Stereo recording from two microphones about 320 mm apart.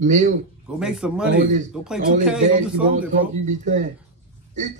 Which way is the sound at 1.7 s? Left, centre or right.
Centre.